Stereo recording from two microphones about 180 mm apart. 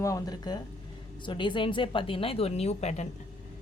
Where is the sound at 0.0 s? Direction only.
20° left (ahead or behind); by 3.1 s 35° left (ahead or behind).